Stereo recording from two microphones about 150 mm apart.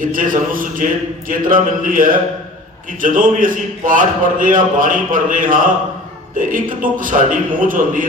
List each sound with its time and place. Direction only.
0.0 s a man's voice: 65° right (ahead or behind)
1.3 s a sound: 65° right (ahead or behind)
3.0 s a man's voice: 65° right (ahead or behind)